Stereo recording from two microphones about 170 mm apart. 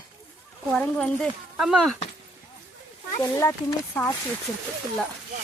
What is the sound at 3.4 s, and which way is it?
Speech, 15° left (ahead or behind).